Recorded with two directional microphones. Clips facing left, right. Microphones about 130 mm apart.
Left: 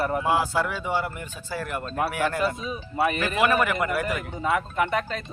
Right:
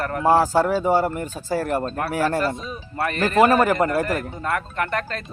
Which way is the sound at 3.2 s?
40° right (ahead or behind).